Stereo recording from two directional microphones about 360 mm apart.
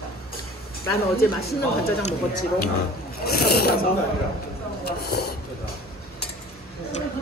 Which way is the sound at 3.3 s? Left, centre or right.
Left.